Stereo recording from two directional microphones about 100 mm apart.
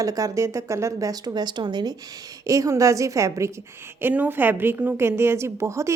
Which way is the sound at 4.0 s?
20° right (ahead or behind).